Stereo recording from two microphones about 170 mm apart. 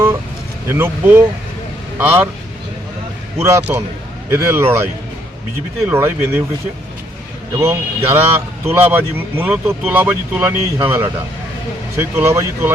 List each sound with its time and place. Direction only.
0.7 s a man's voice: 10° right (ahead or behind)
3.4 s a man's voice: 15° right (ahead or behind)
7.5 s a man's voice: 15° right (ahead or behind)